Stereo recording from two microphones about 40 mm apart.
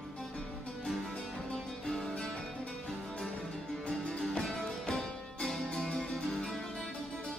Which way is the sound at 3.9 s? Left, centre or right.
Centre.